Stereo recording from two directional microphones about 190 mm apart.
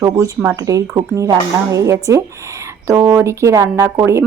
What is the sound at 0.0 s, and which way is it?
A woman's voice, 20° right (ahead or behind).